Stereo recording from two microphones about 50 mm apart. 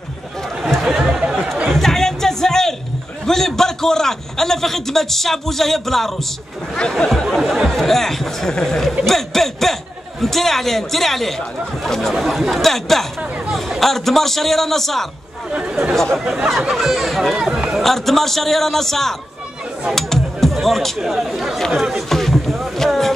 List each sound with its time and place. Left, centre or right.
0.8 s a sound: centre
1.7 s music: centre
3.3 s a man's voice: centre
7.2 s a man's voice: centre
15.5 s speech: centre
16.4 s speech: centre
17.5 s speech: centre
17.7 s speech: centre
22.1 s rowboat: centre